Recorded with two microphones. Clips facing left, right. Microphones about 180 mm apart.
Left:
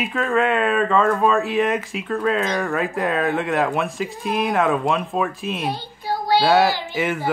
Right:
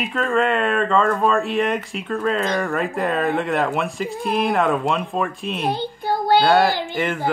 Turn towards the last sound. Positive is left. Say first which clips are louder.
# even
turn(degrees=5)  # may be behind; listen again after turning